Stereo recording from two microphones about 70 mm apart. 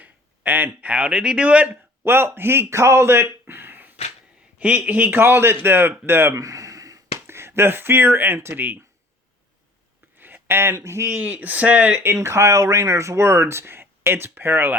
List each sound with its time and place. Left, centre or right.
0.0 s speech: right
2.0 s a man's voice: right
6.3 s a sound: right
7.3 s a man's voice: right
10.2 s a sound: right
10.8 s speech: right
11.1 s a man's voice: centre
12.0 s speech: right